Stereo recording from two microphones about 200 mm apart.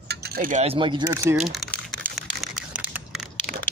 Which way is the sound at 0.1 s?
50° right (ahead or behind).